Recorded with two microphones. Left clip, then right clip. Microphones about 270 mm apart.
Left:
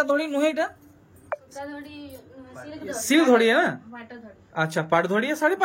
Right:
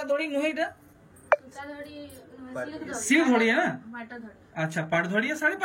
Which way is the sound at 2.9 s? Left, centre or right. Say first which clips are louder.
Left 5 dB; centre.